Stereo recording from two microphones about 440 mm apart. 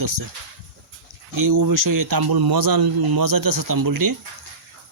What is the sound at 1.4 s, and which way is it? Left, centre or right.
Speech, right.